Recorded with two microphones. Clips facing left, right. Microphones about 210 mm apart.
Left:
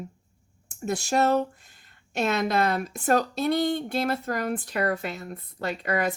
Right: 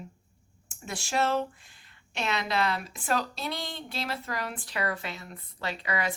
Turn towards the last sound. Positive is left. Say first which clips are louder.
# left 5 dB
turn(degrees=50)  # may be behind; listen again after turning